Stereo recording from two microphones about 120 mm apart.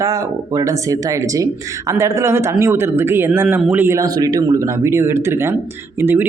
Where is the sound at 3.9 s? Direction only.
30° right (ahead or behind).